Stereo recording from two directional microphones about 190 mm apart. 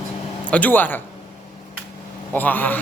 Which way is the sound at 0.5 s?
10° left (ahead or behind).